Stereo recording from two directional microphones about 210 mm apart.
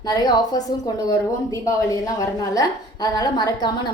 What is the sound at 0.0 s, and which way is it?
A woman's voice, 20° left (ahead or behind).